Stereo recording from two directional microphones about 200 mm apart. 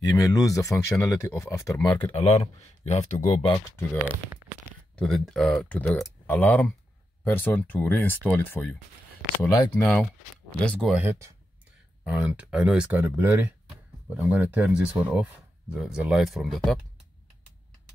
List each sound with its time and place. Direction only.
0.0 s speech: 20° left (ahead or behind); by 3.3 s 35° left (ahead or behind)
3.4 s speech: 20° left (ahead or behind)
4.9 s speech: centre (ahead or behind); by 9.8 s 20° left (ahead or behind)
10.6 s speech: 5° left (ahead or behind)
11.0 s speech: 15° right (ahead or behind)